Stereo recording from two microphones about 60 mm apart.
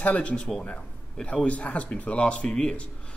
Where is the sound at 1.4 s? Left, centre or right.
Left.